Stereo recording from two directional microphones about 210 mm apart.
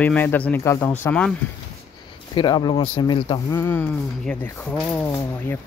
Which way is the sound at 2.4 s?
20° left (ahead or behind).